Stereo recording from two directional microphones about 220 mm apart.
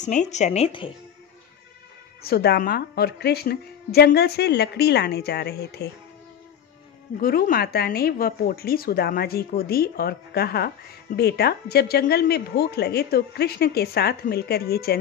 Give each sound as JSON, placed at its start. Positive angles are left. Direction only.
{"t": 0.0, "sound": "speech", "side_deg": 35}
{"t": 2.2, "sound": "speech", "side_deg": 45}
{"t": 7.2, "sound": "speech", "side_deg": 40}